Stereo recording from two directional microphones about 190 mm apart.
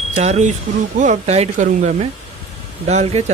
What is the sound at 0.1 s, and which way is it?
Speech, 35° right (ahead or behind).